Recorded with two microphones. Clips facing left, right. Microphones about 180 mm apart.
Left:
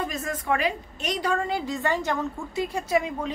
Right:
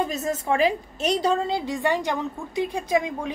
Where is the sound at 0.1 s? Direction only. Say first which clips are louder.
Right 3 dB; 25° right (ahead or behind).